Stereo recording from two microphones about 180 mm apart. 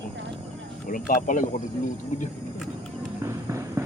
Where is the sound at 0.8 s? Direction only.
50° left (ahead or behind).